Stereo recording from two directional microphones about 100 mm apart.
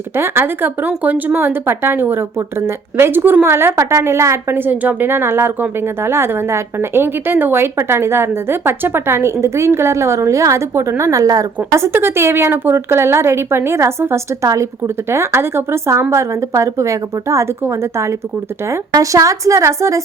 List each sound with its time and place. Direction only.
0.2 s a woman's voice: 20° right (ahead or behind)